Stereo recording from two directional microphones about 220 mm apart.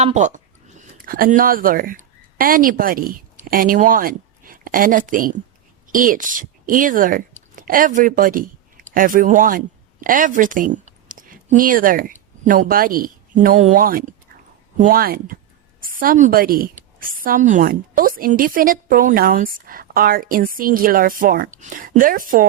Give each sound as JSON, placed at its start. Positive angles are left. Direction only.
{"t": 0.0, "sound": "a woman's voice", "side_deg": -30}